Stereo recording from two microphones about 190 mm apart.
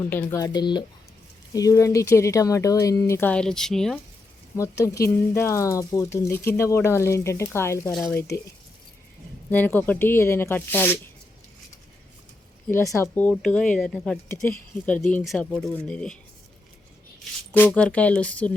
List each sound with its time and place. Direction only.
0.1 s speech: 10° left (ahead or behind)
4.5 s speech: 15° left (ahead or behind)
9.5 s speech: 10° left (ahead or behind)
13.0 s speech: 10° left (ahead or behind)
17.5 s speech: 5° left (ahead or behind)